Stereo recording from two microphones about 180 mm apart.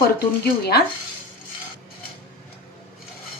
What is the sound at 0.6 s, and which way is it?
Speech, 60° left (ahead or behind).